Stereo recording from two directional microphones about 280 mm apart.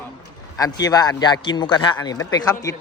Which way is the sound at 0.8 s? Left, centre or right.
Centre.